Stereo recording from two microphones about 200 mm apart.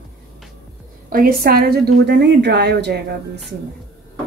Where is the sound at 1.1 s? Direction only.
45° right (ahead or behind).